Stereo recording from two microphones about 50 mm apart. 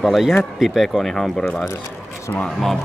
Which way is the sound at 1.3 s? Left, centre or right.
Centre.